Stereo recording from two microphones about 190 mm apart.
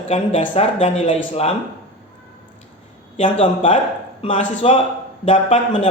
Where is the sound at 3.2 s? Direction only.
30° left (ahead or behind).